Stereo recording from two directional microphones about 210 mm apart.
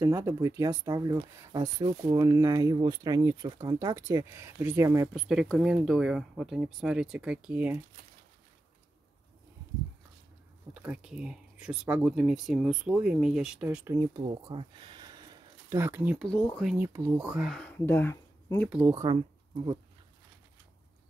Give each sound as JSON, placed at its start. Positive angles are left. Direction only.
{"t": 0.0, "sound": "speech", "side_deg": -15}
{"t": 5.1, "sound": "speech", "side_deg": 0}
{"t": 10.7, "sound": "speech", "side_deg": -5}
{"t": 16.3, "sound": "speech", "side_deg": 5}
{"t": 16.7, "sound": "speech", "side_deg": -10}
{"t": 18.7, "sound": "speech", "side_deg": -10}